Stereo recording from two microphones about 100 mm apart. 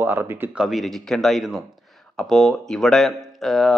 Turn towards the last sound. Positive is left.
turn(degrees=0)  # may be behind; listen again after turning